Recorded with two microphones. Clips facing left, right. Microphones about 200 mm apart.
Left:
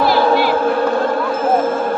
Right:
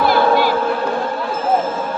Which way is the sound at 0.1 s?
45° right (ahead or behind).